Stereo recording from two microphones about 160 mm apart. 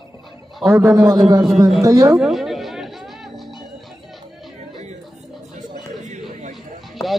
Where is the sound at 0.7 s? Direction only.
20° right (ahead or behind).